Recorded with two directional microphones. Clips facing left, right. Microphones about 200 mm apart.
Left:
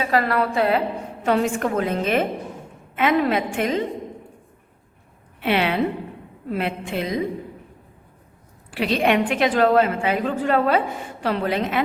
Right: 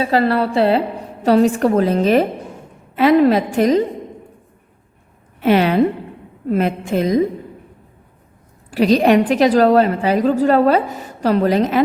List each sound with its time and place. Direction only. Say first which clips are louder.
0.0 s a woman's voice: right 5 dB; 30° right (ahead or behind)
5.4 s a woman's voice: right 7 dB; 40° right (ahead or behind)
8.7 s a woman's voice: right 7 dB; 40° right (ahead or behind)